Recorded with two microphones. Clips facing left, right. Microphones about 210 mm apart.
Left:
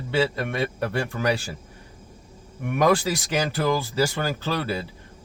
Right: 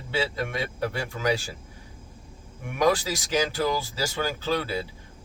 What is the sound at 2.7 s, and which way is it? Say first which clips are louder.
Speech: left 3 dB; 60° left (ahead or behind).